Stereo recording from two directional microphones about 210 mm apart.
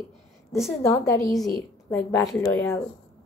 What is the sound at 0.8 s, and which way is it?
Speech, 15° left (ahead or behind).